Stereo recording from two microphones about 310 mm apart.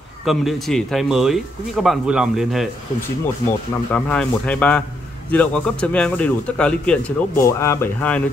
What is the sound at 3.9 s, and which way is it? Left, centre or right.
Speech, centre.